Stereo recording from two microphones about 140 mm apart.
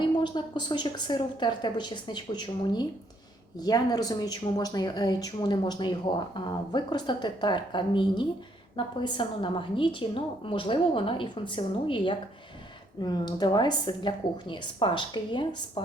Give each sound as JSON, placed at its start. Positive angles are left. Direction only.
{"t": 0.0, "sound": "speech", "side_deg": 35}